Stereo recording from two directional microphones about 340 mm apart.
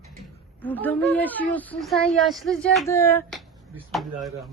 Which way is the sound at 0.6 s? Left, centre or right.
Centre.